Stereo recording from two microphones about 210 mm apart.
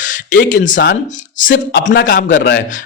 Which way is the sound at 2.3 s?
55° left (ahead or behind).